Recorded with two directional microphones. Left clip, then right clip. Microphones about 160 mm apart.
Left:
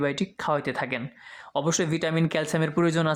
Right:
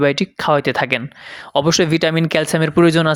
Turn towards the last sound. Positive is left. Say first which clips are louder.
# right 11 dB
turn(degrees=-35)  # may be behind; listen again after turning